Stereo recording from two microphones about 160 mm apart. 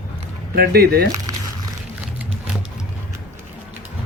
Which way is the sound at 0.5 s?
75° right (ahead or behind).